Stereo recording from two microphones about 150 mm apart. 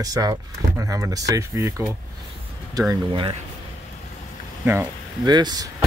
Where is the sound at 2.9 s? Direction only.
35° right (ahead or behind).